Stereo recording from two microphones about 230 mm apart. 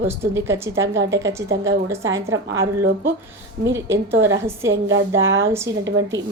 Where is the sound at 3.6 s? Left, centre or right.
Centre.